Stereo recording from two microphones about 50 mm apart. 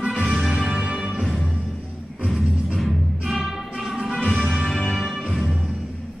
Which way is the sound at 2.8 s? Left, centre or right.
Centre.